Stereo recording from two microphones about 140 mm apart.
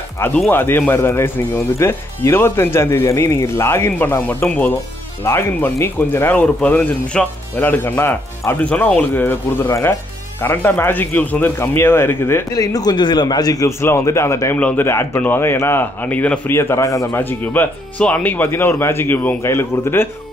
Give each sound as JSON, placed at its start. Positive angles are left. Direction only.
{"t": 0.5, "sound": "speech", "side_deg": 15}